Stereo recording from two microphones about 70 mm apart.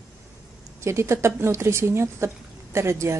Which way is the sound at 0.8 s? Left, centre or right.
Right.